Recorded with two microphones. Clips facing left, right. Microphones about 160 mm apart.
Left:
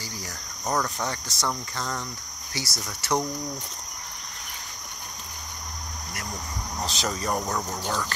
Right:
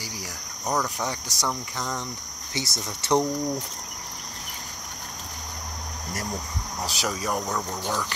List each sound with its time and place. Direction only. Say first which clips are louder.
0.7 s cricket: even; 15° right (ahead or behind)
2.5 s speech: right 3 dB; 20° right (ahead or behind)
6.9 s speech: even; 10° right (ahead or behind)